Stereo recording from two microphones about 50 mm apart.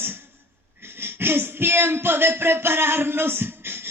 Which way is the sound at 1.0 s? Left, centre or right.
Right.